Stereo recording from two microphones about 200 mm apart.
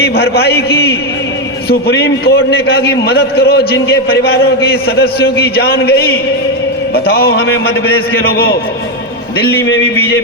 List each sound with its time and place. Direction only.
0.0 s a man's voice: 55° left (ahead or behind)